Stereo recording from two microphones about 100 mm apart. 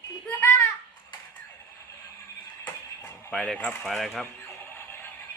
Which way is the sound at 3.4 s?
10° left (ahead or behind).